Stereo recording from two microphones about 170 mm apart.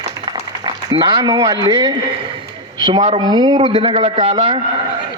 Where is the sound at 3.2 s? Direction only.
30° right (ahead or behind).